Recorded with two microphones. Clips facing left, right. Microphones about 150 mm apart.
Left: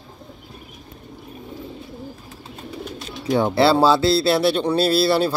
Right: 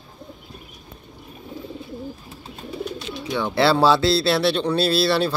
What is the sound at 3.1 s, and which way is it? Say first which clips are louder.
Bird: left 7 dB; 45° left (ahead or behind).